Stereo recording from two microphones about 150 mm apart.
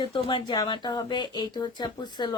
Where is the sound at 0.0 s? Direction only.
35° left (ahead or behind).